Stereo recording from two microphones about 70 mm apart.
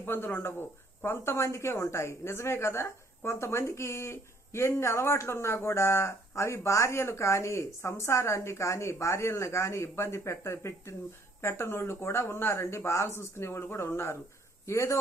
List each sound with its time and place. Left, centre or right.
0.0 s a woman's voice: left